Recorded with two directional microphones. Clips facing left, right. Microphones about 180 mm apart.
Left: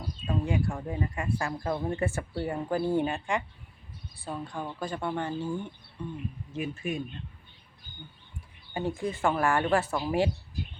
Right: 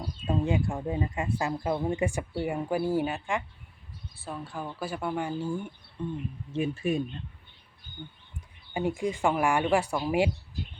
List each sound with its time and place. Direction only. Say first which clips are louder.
0.3 s speech: right 2 dB; 25° right (ahead or behind)
6.5 s speech: right 5 dB; 30° right (ahead or behind)
8.4 s speech: right 2 dB; 15° right (ahead or behind)